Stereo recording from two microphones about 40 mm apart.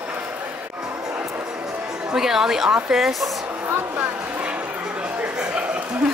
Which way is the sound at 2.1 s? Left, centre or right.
Centre.